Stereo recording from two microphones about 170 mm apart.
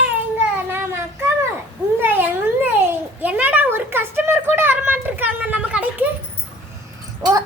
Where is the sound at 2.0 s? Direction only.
10° right (ahead or behind).